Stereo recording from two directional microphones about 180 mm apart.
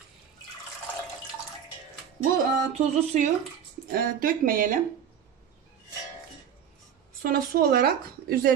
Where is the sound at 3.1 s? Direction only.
40° right (ahead or behind).